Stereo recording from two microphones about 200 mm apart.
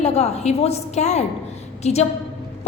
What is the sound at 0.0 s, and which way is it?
A woman's voice, 30° left (ahead or behind).